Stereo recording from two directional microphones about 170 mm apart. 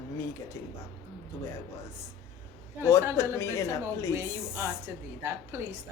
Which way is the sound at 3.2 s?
15° left (ahead or behind).